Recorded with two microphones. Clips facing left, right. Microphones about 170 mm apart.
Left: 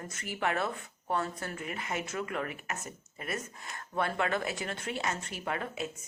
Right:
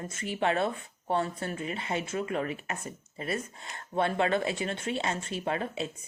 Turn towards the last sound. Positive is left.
turn(degrees=-25)  # may be behind; listen again after turning